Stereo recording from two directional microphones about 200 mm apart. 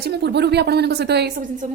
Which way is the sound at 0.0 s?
55° right (ahead or behind).